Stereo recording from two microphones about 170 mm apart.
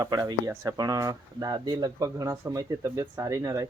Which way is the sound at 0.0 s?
20° right (ahead or behind).